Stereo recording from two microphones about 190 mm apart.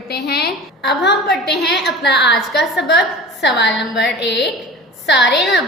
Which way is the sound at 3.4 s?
65° left (ahead or behind).